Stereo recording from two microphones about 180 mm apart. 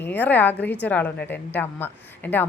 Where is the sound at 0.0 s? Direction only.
10° left (ahead or behind).